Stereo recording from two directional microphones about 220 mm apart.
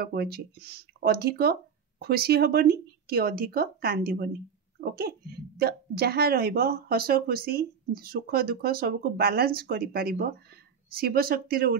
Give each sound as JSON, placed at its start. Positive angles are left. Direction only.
{"t": 0.0, "sound": "a woman's voice", "side_deg": -45}